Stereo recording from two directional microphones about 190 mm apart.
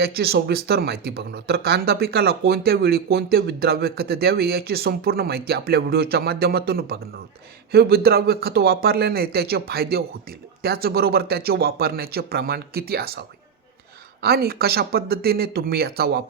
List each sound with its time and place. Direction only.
0.0 s speech: 55° right (ahead or behind)